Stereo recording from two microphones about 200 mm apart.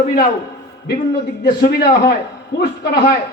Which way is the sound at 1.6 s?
50° left (ahead or behind).